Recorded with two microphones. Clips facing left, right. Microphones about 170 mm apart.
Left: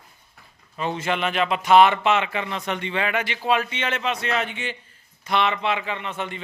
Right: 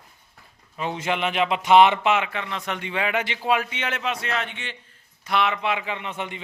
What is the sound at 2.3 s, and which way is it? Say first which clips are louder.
Speech: left 3 dB; 5° left (ahead or behind).